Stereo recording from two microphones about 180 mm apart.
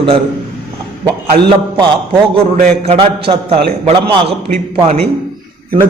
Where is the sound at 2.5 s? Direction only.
45° right (ahead or behind).